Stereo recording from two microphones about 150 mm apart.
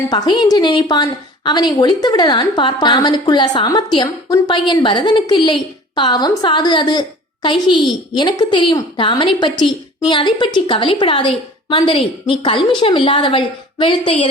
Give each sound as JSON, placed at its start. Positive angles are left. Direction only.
{"t": 0.1, "sound": "a woman's voice", "side_deg": 30}